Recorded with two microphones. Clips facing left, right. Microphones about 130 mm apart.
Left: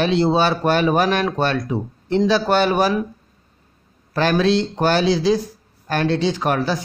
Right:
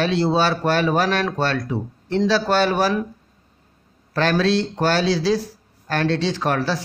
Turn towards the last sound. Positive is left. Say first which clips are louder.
# left 2 dB
turn(degrees=15)  # may be behind; listen again after turning